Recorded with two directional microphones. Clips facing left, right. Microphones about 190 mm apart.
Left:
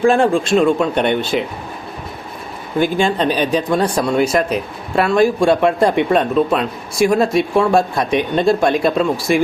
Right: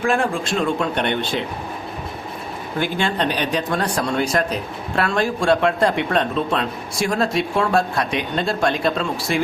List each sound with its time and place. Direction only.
0.0 s a man's voice: 30° left (ahead or behind)
0.5 s speech: 15° left (ahead or behind)
2.7 s speech: 15° left (ahead or behind)